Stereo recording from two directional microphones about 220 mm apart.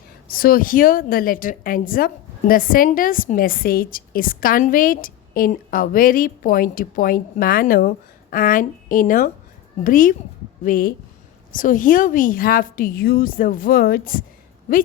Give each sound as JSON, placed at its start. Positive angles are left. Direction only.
{"t": 0.3, "sound": "a woman's voice", "side_deg": 40}